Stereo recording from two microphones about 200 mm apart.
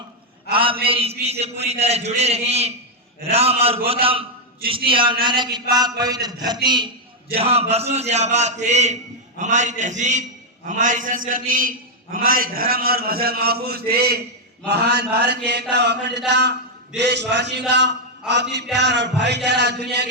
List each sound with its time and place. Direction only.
0.5 s a man's voice: 25° right (ahead or behind); by 14.2 s 50° right (ahead or behind)
14.7 s mantra: 55° right (ahead or behind)